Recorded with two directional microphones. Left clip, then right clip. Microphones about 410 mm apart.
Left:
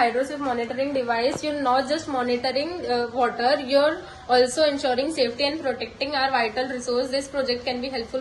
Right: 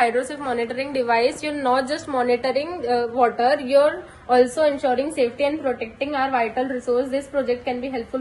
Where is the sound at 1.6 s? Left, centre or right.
Centre.